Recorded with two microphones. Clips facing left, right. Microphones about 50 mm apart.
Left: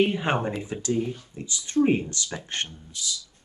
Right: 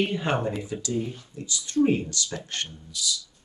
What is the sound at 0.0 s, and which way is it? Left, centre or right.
Speech, left.